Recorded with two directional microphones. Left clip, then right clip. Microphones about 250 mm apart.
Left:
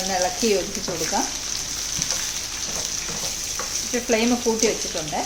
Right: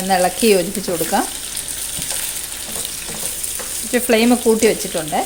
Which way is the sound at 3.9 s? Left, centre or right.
Right.